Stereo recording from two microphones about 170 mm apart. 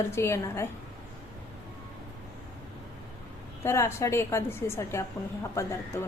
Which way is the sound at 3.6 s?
15° left (ahead or behind).